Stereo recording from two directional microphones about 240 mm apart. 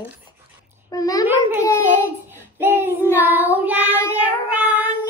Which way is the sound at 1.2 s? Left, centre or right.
Centre.